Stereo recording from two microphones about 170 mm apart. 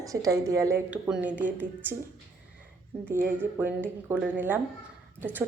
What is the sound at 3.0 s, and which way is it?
A woman's voice, 10° right (ahead or behind).